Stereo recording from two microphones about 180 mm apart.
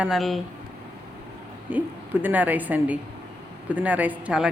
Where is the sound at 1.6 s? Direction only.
10° right (ahead or behind).